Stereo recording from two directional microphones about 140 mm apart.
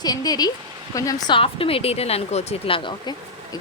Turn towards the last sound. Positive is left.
turn(degrees=35)  # may be behind; listen again after turning